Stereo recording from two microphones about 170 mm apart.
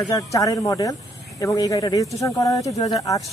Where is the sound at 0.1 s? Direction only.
20° left (ahead or behind).